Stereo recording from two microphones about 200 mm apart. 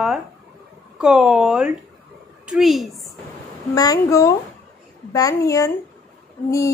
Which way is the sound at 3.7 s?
20° left (ahead or behind).